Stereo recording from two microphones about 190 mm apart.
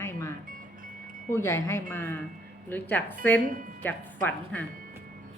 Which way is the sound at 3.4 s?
45° right (ahead or behind).